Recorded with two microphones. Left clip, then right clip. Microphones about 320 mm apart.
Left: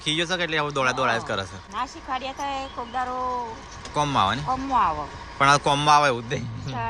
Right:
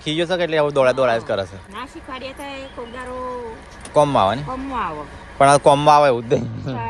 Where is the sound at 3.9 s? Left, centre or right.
Centre.